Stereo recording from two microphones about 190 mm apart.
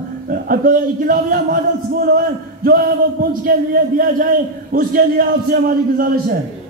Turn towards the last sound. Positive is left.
turn(degrees=-50)  # may be behind; listen again after turning